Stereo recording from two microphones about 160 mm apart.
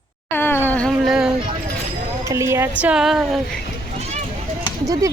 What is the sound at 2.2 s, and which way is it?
Speech, 20° right (ahead or behind).